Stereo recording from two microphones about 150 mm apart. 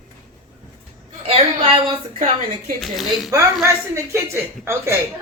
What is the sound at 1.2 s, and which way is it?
Speech, 40° right (ahead or behind).